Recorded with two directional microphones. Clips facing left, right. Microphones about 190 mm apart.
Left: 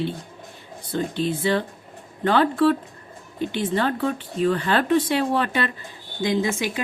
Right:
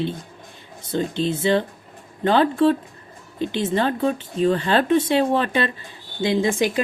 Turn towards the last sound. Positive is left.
turn(degrees=-25)  # may be behind; listen again after turning